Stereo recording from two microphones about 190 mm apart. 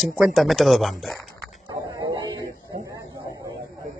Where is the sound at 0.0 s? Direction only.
Centre (ahead or behind).